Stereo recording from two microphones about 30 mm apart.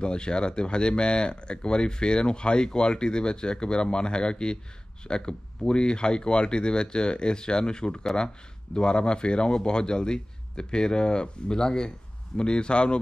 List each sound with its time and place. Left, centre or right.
0.0 s speech: left